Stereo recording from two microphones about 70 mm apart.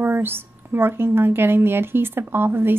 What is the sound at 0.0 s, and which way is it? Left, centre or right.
A woman's voice, right.